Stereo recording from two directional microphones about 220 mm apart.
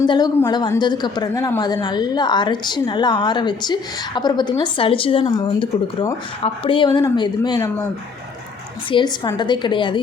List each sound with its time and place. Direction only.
0.0 s a woman's voice: 20° left (ahead or behind)
8.9 s a woman's voice: 20° left (ahead or behind)